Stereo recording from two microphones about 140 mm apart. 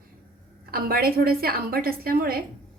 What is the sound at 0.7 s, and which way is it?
A woman's voice, 90° right.